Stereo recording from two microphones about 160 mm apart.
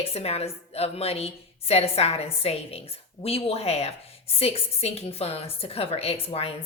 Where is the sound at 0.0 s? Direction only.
40° left (ahead or behind).